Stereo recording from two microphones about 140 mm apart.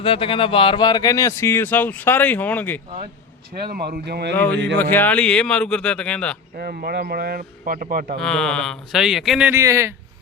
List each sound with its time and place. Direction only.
0.0 s speech: 40° left (ahead or behind); by 2.8 s 10° left (ahead or behind)
3.7 s speech: 90° right
4.4 s speech: 10° left (ahead or behind)
6.6 s speech: 90° right
8.2 s speech: 5° left (ahead or behind)
9.5 s speech: 20° right (ahead or behind)